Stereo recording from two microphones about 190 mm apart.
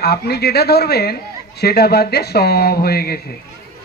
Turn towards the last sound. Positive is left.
turn(degrees=55)  # may be behind; listen again after turning